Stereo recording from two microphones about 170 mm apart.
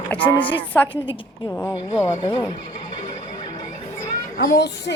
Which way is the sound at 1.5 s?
10° left (ahead or behind).